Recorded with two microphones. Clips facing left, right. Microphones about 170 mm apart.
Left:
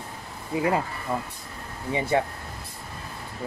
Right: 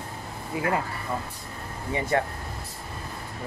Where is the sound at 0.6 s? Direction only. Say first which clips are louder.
Left 3 dB; 20° left (ahead or behind).